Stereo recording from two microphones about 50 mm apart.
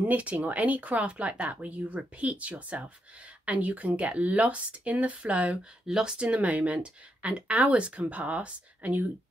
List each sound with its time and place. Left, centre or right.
0.0 s speech: right
5.9 s speech: centre
6.1 s speech: right